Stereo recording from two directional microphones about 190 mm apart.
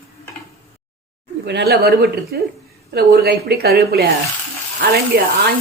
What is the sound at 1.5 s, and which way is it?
A woman's voice, 60° right (ahead or behind).